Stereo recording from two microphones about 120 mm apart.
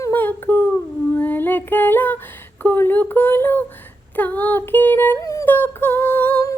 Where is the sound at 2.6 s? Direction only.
15° left (ahead or behind).